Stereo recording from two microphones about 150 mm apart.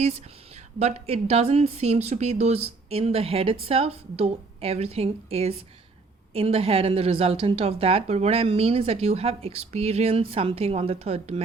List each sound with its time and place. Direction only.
0.0 s a woman's voice: 45° right (ahead or behind)